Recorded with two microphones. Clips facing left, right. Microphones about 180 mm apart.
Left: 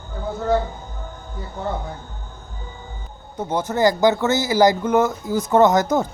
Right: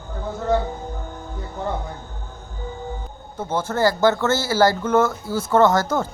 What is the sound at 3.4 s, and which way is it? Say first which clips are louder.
A man's voice: left 2 dB; 15° left (ahead or behind).